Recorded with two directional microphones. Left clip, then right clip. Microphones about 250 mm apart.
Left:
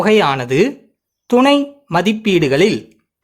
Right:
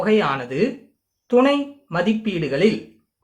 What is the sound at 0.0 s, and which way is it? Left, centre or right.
Speech, left.